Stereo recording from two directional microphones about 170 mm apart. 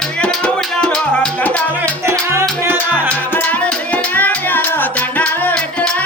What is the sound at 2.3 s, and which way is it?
Music, 15° right (ahead or behind).